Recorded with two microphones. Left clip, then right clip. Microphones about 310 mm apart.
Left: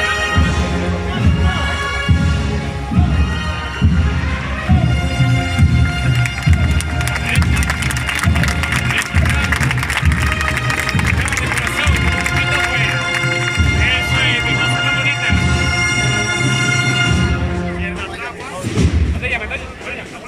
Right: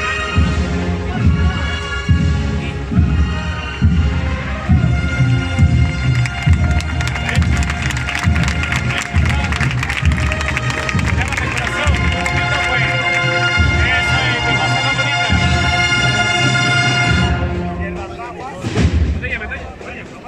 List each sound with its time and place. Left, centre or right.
13.8 s music: right
15.3 s bagpipes: right